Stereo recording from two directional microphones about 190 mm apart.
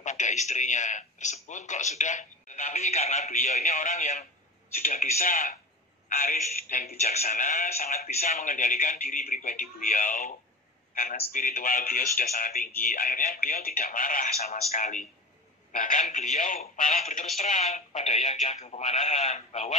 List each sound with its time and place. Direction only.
0.0 s a man's voice: 40° left (ahead or behind)